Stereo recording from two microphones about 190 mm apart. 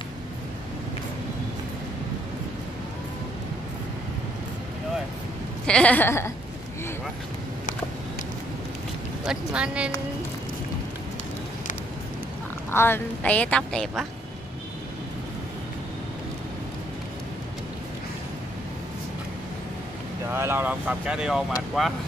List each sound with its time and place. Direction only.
5.7 s a woman's voice: 5° left (ahead or behind)
9.2 s speech: 5° right (ahead or behind)
12.7 s a woman's voice: 10° left (ahead or behind)
20.3 s speech: 10° right (ahead or behind)